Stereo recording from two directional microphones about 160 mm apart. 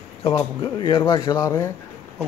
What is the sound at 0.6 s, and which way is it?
Speech, 30° left (ahead or behind).